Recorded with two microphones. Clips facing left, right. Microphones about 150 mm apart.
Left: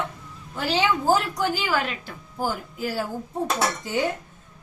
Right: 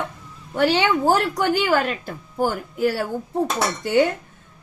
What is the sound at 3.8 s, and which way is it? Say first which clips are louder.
Speech: right 8 dB; 75° right (ahead or behind).